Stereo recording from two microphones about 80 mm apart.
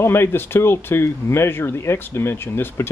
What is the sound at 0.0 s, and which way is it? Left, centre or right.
Speech, left.